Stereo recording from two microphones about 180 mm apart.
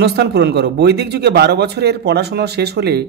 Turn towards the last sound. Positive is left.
turn(degrees=-65)  # may be behind; listen again after turning